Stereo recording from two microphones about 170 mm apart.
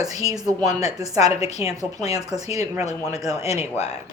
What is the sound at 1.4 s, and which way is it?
Speech, 40° left (ahead or behind).